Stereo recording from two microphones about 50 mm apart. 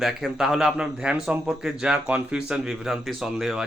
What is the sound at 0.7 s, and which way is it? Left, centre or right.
A man's voice, centre.